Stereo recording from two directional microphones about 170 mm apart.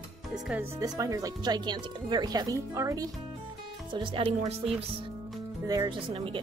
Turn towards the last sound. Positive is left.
turn(degrees=-30)  # may be behind; listen again after turning